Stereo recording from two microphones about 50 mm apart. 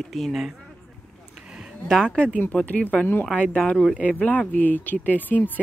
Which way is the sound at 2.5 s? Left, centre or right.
Left.